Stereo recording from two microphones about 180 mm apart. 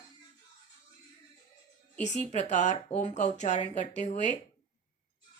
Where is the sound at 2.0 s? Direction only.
40° left (ahead or behind).